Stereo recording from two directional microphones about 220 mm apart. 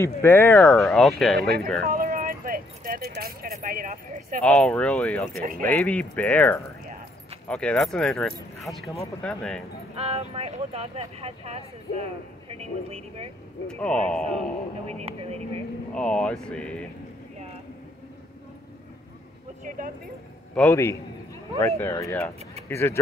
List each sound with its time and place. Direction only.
0.0 s speech: 10° left (ahead or behind)
1.9 s a sound: 40° right (ahead or behind)
4.4 s speech: centre (ahead or behind)
9.9 s speech: 25° right (ahead or behind)
13.7 s speech: 5° left (ahead or behind)
15.0 s speech: 30° right (ahead or behind)
15.9 s speech: 5° left (ahead or behind)
20.5 s speech: 10° left (ahead or behind)